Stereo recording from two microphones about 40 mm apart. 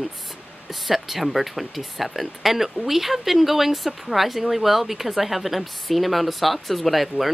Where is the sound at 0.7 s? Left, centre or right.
Centre.